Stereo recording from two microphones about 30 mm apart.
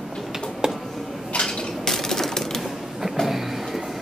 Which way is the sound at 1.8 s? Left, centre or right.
Centre.